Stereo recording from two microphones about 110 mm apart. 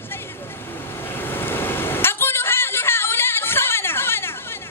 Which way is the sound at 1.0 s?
20° left (ahead or behind).